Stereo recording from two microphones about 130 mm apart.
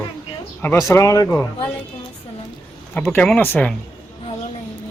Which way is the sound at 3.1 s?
10° left (ahead or behind).